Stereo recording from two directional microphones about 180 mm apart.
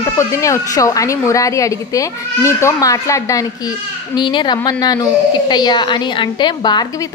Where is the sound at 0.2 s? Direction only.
15° left (ahead or behind).